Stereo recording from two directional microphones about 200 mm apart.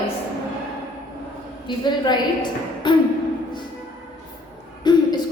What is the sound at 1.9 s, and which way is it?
A woman's voice, 20° left (ahead or behind).